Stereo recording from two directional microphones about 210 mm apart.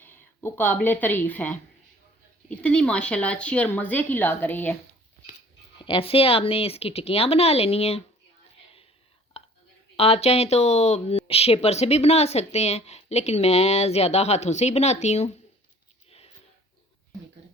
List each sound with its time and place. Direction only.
0.0 s speech: 10° left (ahead or behind)
5.8 s speech: 25° left (ahead or behind)
9.4 s whispering: 30° left (ahead or behind)
10.0 s a woman's voice: 30° left (ahead or behind)
16.0 s a sound: 30° left (ahead or behind)